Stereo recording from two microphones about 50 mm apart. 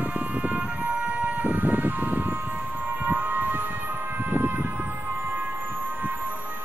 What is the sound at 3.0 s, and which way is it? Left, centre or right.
Siren, right.